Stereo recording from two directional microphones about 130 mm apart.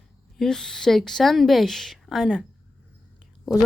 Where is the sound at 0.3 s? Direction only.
5° left (ahead or behind).